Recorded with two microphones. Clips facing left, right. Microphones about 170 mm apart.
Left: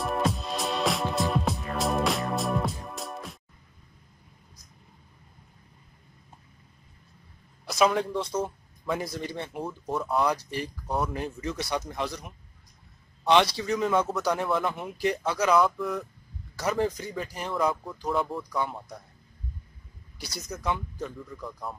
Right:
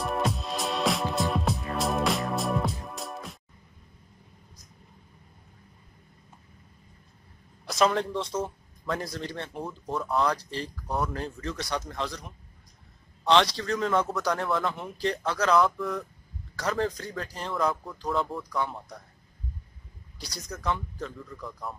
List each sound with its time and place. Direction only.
0.0 s music: centre (ahead or behind)
7.6 s a man's voice: 5° left (ahead or behind)
20.4 s speech: 5° left (ahead or behind)